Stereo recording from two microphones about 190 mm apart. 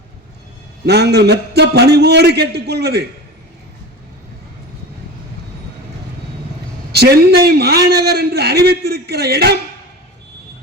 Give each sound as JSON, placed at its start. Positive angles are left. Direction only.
{"t": 0.9, "sound": "a man's voice", "side_deg": -60}
{"t": 6.9, "sound": "a man's voice", "side_deg": -55}